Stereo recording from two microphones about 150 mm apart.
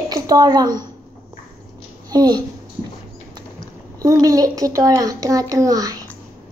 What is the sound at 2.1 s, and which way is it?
Speech, 25° right (ahead or behind).